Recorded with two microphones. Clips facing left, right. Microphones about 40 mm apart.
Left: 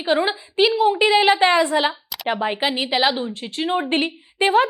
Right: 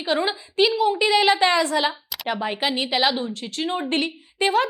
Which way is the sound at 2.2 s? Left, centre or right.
Left.